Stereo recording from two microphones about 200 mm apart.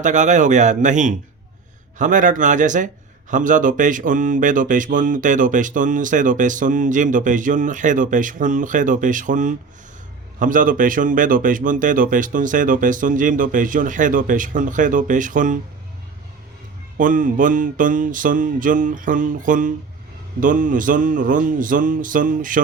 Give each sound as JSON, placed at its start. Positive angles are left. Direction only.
{"t": 0.0, "sound": "a man's voice", "side_deg": -40}
{"t": 17.0, "sound": "a man's voice", "side_deg": -40}